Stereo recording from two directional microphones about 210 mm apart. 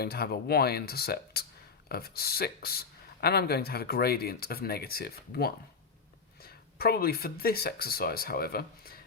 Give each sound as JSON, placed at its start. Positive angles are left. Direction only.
{"t": 0.0, "sound": "speech", "side_deg": 50}